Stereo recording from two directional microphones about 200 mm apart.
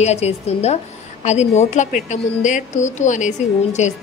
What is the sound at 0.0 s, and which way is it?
A woman's voice, 35° left (ahead or behind).